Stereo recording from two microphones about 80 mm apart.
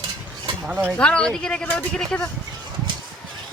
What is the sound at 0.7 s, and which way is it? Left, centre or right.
Speech, right.